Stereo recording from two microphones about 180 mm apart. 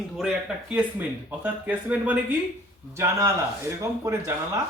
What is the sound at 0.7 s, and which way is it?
Speech, 10° right (ahead or behind).